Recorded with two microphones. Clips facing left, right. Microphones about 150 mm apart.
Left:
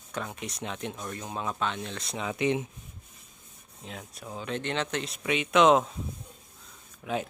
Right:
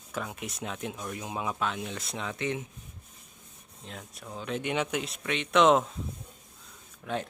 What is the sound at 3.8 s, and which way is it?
Speech, centre (ahead or behind).